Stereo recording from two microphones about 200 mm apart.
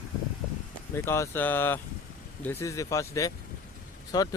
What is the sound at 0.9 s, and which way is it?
Speech, 15° left (ahead or behind).